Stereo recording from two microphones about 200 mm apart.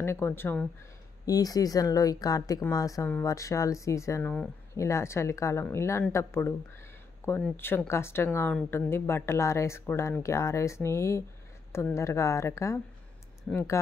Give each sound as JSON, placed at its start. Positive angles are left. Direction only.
{"t": 0.0, "sound": "a woman's voice", "side_deg": 10}